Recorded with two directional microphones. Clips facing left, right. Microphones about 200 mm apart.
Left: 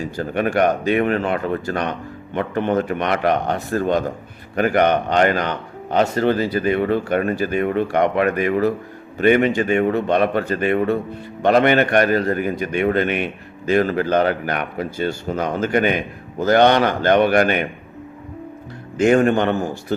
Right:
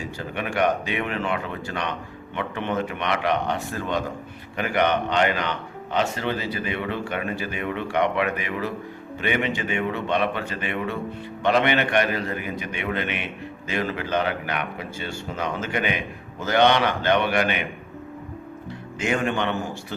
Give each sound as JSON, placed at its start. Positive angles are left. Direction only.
{"t": 0.2, "sound": "a man's voice", "side_deg": 45}
{"t": 18.9, "sound": "a man's voice", "side_deg": 45}